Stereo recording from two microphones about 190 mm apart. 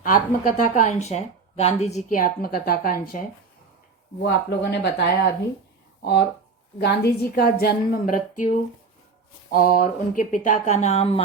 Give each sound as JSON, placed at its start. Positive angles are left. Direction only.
{"t": 0.0, "sound": "a woman's voice", "side_deg": 45}
{"t": 4.2, "sound": "a woman's voice", "side_deg": 65}